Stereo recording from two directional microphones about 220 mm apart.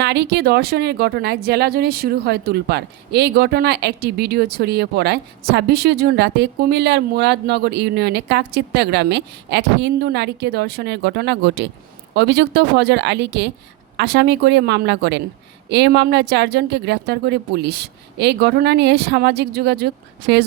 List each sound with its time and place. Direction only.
0.0 s speech: 50° right (ahead or behind)